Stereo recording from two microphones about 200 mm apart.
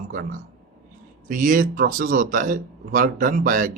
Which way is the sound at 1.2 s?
45° right (ahead or behind).